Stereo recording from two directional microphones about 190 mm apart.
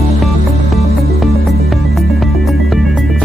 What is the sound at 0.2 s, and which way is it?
Music, centre (ahead or behind).